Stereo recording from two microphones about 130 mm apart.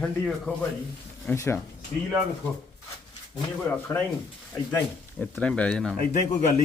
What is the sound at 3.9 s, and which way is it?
Speech, 25° left (ahead or behind).